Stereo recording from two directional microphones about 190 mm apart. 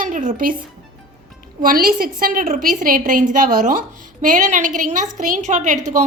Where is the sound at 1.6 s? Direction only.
50° right (ahead or behind).